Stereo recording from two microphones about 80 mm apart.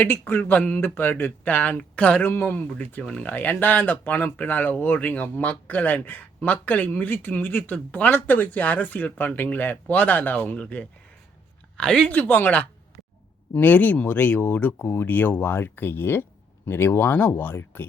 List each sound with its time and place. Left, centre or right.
0.0 s speech: left
12.1 s speech: left